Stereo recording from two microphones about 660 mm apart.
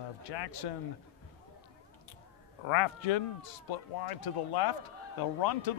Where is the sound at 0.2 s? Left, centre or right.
Left.